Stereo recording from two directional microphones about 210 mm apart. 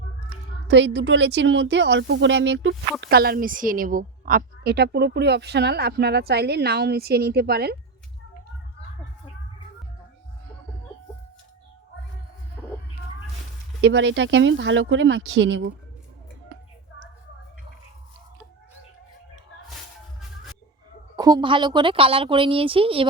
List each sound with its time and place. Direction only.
0.7 s speech: 55° right (ahead or behind)
3.0 s a woman's voice: 50° right (ahead or behind)
12.6 s a sound: 5° left (ahead or behind)
13.8 s speech: 60° right (ahead or behind)
21.2 s speech: 20° right (ahead or behind)